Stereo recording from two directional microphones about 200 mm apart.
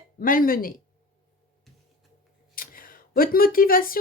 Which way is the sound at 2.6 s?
45° left (ahead or behind).